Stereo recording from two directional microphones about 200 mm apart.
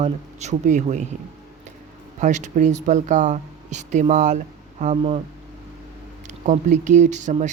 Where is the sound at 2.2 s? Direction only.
35° right (ahead or behind).